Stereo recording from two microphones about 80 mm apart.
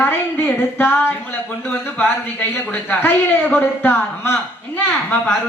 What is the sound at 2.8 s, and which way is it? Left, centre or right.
A man's voice, left.